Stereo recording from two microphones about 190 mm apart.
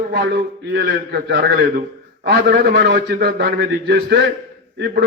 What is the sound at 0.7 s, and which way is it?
A man's voice, 60° right (ahead or behind).